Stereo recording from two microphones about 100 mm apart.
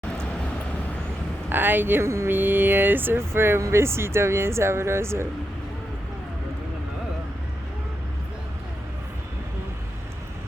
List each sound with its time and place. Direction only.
1.5 s speech: 20° right (ahead or behind)